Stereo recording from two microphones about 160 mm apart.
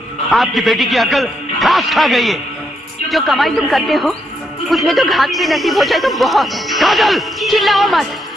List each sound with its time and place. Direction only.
0.3 s speech: centre (ahead or behind)